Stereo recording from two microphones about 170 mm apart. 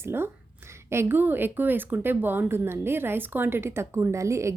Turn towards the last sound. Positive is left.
turn(degrees=-15)  # may be behind; listen again after turning